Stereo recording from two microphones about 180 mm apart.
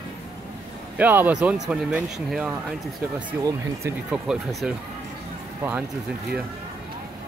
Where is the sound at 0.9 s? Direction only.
10° right (ahead or behind).